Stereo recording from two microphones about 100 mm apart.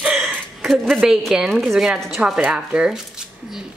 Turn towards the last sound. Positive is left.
turn(degrees=-5)  # may be behind; listen again after turning